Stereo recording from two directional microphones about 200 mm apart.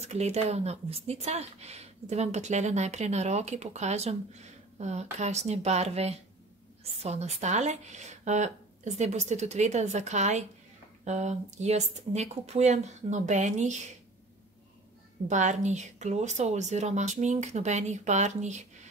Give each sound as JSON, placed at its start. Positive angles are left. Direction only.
{"t": 0.0, "sound": "speech", "side_deg": -35}
{"t": 15.2, "sound": "speech", "side_deg": -35}